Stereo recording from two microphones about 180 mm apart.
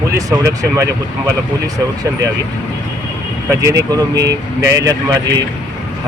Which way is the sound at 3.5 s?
15° right (ahead or behind).